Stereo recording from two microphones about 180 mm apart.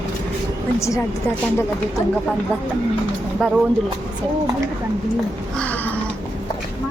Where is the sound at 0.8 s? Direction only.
15° left (ahead or behind).